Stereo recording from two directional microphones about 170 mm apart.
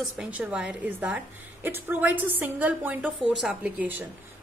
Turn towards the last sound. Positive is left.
turn(degrees=-10)  # may be behind; listen again after turning